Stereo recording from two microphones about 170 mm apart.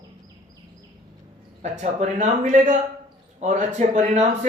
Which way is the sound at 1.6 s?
45° right (ahead or behind).